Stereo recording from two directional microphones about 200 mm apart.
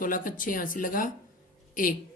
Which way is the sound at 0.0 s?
45° left (ahead or behind).